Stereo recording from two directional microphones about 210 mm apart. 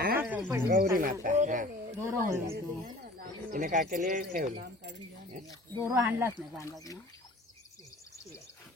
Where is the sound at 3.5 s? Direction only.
40° right (ahead or behind).